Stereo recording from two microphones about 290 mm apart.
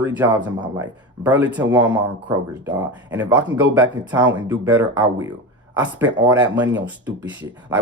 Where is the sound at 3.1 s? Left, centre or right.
Centre.